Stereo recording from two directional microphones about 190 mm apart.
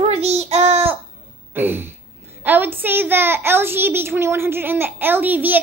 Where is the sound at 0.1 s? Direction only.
35° right (ahead or behind).